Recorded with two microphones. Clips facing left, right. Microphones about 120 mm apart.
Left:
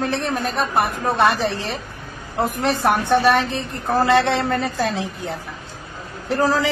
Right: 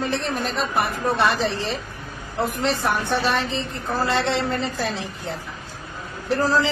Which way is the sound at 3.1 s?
60° left (ahead or behind).